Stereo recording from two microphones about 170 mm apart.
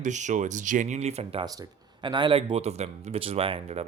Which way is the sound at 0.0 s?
45° right (ahead or behind).